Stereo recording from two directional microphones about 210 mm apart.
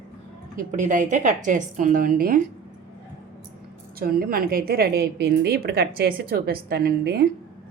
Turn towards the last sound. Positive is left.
turn(degrees=-50)  # may be behind; listen again after turning